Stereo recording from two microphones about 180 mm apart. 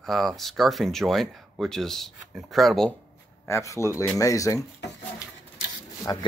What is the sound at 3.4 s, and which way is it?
Speech, 15° left (ahead or behind).